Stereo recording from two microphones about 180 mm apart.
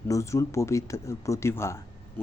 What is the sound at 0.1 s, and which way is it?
Speech, 15° left (ahead or behind).